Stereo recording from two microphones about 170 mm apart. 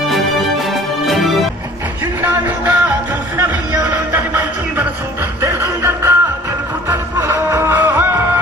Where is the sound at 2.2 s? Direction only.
10° right (ahead or behind).